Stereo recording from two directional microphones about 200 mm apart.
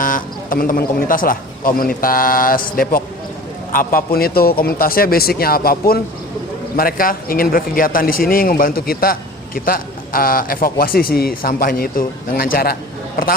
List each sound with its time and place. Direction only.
0.0 s a man's voice: 45° left (ahead or behind)